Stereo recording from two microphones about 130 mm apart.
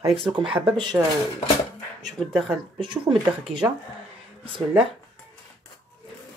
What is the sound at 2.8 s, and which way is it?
Speech, 40° right (ahead or behind).